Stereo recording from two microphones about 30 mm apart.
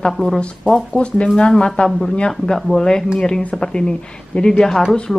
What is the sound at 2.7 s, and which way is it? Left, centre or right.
A woman's voice, left.